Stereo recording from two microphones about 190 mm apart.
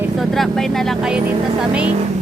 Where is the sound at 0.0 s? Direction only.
Centre (ahead or behind).